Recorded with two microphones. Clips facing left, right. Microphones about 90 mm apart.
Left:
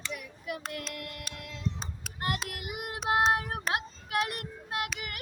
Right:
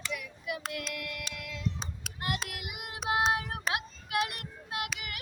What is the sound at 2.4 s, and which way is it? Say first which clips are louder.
Child singing: left 4 dB; 45° left (ahead or behind).